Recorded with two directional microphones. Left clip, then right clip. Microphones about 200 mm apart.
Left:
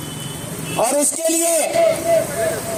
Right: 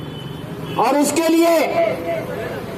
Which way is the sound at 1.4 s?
40° left (ahead or behind).